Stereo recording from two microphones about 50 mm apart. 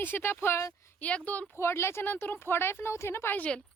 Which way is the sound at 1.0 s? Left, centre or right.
Left.